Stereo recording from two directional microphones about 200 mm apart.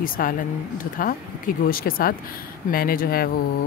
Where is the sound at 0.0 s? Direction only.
45° left (ahead or behind).